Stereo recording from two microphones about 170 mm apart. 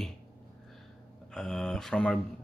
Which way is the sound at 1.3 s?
5° left (ahead or behind).